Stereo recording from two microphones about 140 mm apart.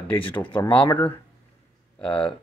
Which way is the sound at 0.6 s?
10° left (ahead or behind).